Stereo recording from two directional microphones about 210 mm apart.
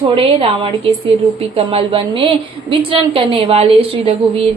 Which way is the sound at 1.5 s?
25° right (ahead or behind).